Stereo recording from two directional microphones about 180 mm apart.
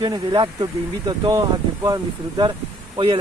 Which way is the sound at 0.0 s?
20° right (ahead or behind).